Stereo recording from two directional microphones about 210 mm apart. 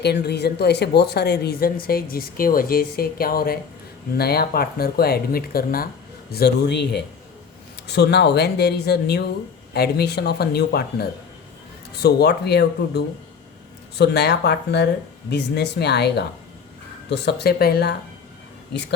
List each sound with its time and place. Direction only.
0.0 s a woman's voice: 50° left (ahead or behind)